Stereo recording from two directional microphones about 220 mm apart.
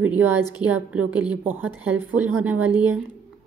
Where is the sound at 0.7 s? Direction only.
5° right (ahead or behind).